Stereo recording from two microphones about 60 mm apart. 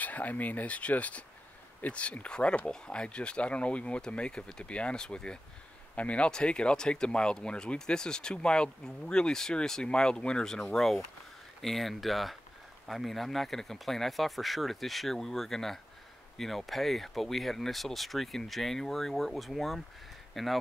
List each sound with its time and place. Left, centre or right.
0.0 s speech: left; by 20.5 s centre